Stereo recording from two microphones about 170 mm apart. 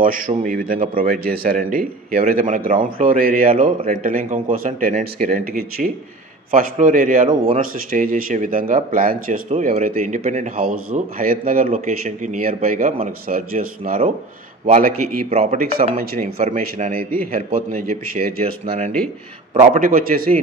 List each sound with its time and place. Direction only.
0.3 s a man's voice: 55° right (ahead or behind)
7.2 s a man's voice: 35° right (ahead or behind)
7.9 s a man's voice: 55° right (ahead or behind)
11.6 s a man's voice: 45° right (ahead or behind)
14.7 s a man's voice: 40° right (ahead or behind)
16.0 s a man's voice: 60° right (ahead or behind)